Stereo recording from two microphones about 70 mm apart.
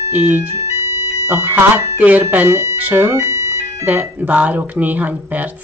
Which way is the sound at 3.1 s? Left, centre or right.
Right.